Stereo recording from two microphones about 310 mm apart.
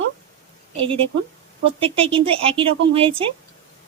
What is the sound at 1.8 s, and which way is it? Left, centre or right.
Speech, centre.